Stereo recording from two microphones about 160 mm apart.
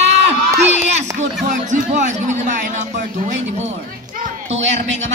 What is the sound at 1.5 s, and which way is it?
Speech, 50° right (ahead or behind).